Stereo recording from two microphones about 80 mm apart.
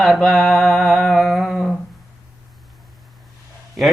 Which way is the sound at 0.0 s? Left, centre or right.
Centre.